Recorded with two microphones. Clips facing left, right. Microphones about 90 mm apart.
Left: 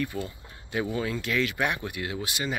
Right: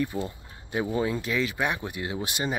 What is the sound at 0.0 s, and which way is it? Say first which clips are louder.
Speech: right 2 dB; 20° right (ahead or behind).